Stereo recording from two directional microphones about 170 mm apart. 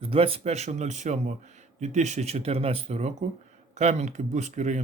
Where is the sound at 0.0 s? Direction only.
35° right (ahead or behind).